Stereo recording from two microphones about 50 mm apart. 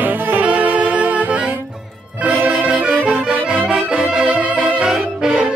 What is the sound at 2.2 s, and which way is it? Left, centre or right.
Music, right.